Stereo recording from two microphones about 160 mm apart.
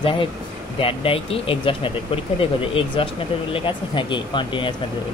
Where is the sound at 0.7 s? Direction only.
35° left (ahead or behind).